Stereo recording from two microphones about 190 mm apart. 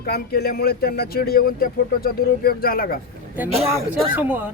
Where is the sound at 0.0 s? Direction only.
55° left (ahead or behind).